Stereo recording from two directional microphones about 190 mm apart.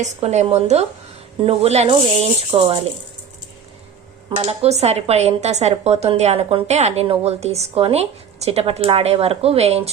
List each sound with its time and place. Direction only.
0.0 s speech: 35° right (ahead or behind)
4.4 s speech: 35° right (ahead or behind)